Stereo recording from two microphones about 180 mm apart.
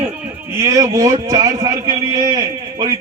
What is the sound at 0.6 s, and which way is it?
A man's voice, 15° right (ahead or behind).